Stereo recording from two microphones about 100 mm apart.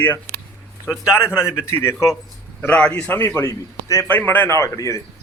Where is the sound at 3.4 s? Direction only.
25° left (ahead or behind).